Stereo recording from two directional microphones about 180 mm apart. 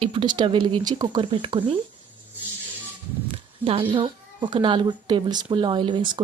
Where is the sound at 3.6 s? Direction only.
30° right (ahead or behind).